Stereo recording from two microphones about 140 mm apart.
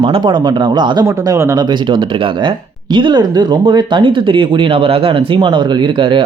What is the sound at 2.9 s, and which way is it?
Speech, 35° right (ahead or behind).